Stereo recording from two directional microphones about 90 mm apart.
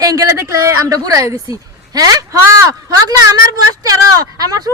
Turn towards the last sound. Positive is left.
turn(degrees=-45)  # may be behind; listen again after turning